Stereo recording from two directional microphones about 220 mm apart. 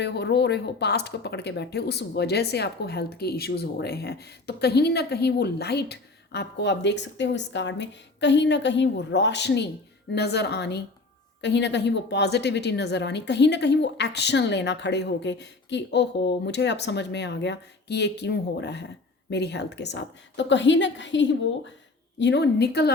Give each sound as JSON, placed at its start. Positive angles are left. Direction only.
{"t": 0.0, "sound": "a woman's voice", "side_deg": 50}